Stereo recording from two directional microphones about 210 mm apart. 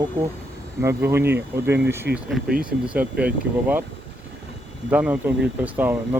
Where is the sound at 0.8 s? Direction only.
10° right (ahead or behind).